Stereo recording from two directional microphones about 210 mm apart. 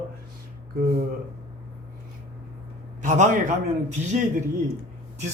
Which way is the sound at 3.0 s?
35° right (ahead or behind).